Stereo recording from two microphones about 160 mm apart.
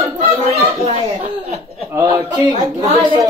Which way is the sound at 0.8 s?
40° right (ahead or behind).